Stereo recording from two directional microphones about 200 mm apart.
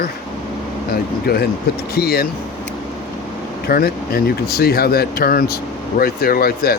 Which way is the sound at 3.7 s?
50° left (ahead or behind).